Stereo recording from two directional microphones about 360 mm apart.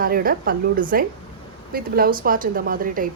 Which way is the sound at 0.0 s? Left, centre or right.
Right.